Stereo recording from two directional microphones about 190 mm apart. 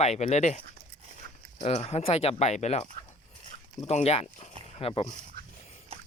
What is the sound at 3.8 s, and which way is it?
Speech, 35° left (ahead or behind).